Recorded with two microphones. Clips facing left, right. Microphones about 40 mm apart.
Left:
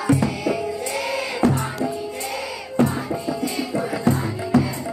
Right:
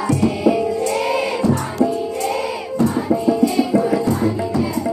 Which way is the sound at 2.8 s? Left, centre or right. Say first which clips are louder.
Right 1 dB; left.